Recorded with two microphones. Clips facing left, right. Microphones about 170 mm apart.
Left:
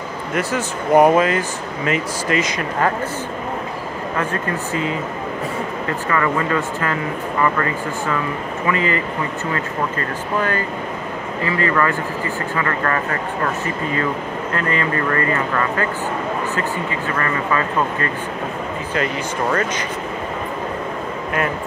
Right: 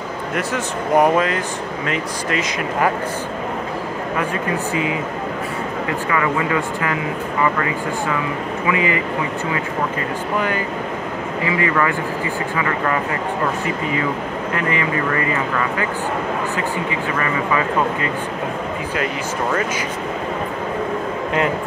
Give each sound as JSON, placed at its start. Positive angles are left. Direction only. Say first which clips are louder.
{"t": 0.3, "sound": "speech", "louder": "left 2 dB", "side_deg": 0}
{"t": 4.2, "sound": "speech", "louder": "right 1 dB", "side_deg": -15}
{"t": 6.0, "sound": "speech", "louder": "left 1 dB", "side_deg": -10}
{"t": 8.6, "sound": "speech", "louder": "even", "side_deg": -15}
{"t": 14.5, "sound": "speech", "louder": "even", "side_deg": -15}
{"t": 16.5, "sound": "speech", "louder": "right 1 dB", "side_deg": -15}